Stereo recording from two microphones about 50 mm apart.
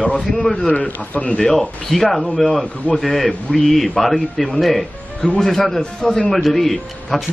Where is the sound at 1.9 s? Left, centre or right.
Centre.